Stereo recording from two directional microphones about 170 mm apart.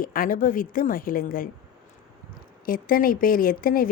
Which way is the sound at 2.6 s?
55° left (ahead or behind).